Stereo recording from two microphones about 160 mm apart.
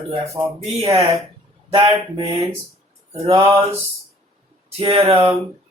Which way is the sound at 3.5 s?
35° right (ahead or behind).